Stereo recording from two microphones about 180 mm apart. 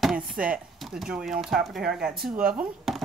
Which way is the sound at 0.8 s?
5° right (ahead or behind).